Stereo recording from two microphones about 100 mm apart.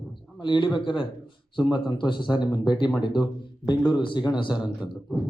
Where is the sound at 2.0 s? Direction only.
50° left (ahead or behind).